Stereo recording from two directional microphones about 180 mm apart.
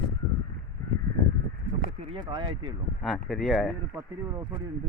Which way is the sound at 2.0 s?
30° right (ahead or behind).